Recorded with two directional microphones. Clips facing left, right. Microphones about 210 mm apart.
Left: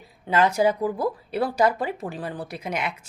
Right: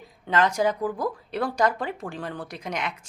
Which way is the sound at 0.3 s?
10° left (ahead or behind).